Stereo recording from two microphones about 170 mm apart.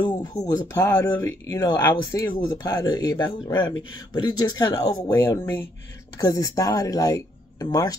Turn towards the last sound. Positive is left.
turn(degrees=20)  # may be behind; listen again after turning